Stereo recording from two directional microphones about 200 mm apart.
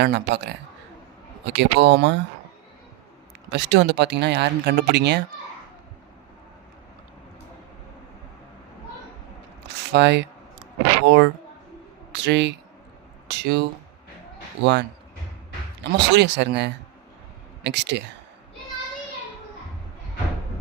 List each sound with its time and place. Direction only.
0.0 s speech: 60° right (ahead or behind)
3.5 s speech: 60° right (ahead or behind)
9.9 s speech: 60° right (ahead or behind)